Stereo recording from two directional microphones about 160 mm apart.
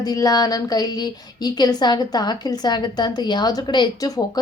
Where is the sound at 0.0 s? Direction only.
25° left (ahead or behind).